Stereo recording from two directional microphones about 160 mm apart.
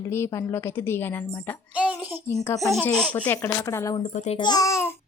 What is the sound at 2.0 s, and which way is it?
Speech, 10° right (ahead or behind).